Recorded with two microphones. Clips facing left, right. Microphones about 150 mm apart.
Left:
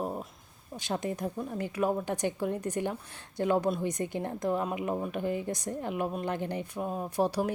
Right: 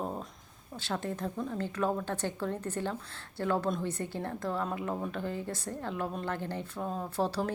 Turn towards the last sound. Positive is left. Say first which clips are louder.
# left 3 dB
turn(degrees=15)  # may be behind; listen again after turning